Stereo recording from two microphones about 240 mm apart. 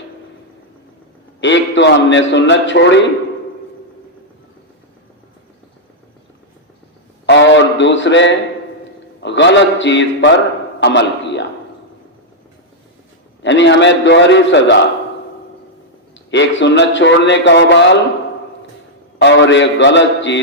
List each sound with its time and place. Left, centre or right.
1.4 s a man's voice: left
7.3 s a sound: left
9.2 s a man's voice: left
13.4 s a man's voice: left
16.3 s a man's voice: left
19.2 s a man's voice: left